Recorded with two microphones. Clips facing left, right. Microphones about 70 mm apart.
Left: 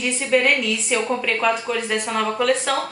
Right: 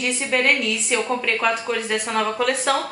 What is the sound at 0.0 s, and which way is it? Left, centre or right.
A woman's voice, centre.